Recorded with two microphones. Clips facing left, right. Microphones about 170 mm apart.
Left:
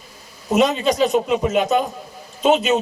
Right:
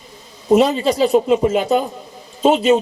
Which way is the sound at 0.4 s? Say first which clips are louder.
Right 4 dB; 35° right (ahead or behind).